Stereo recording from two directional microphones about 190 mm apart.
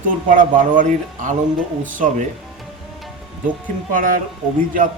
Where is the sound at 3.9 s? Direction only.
45° right (ahead or behind).